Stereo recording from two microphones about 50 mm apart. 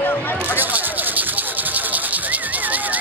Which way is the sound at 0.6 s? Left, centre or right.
Right.